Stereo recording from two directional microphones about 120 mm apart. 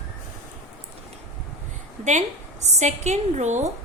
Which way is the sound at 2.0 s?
80° right.